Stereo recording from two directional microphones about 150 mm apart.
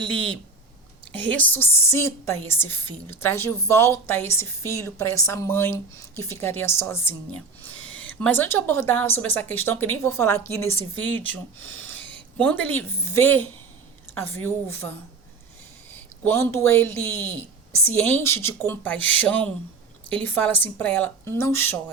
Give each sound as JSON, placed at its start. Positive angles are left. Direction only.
{"t": 0.0, "sound": "a woman's voice", "side_deg": 5}
{"t": 16.2, "sound": "a woman's voice", "side_deg": 20}